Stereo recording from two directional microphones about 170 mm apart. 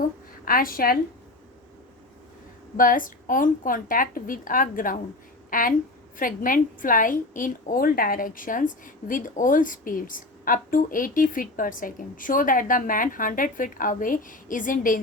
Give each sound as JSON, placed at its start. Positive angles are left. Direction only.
{"t": 0.4, "sound": "a woman's voice", "side_deg": 55}
{"t": 2.7, "sound": "a woman's voice", "side_deg": 55}